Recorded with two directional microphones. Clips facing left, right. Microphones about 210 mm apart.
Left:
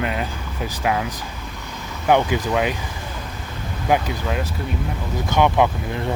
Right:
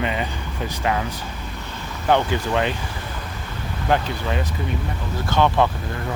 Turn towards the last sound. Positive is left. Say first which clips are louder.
# left 2 dB
turn(degrees=15)  # may be behind; listen again after turning